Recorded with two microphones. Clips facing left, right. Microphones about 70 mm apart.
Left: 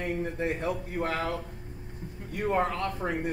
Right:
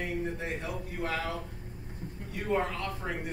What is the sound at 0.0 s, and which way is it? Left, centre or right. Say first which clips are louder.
Speech: left 3 dB; left.